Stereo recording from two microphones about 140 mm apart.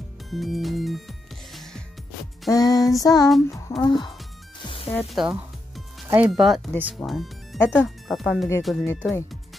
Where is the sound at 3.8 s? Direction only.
30° left (ahead or behind).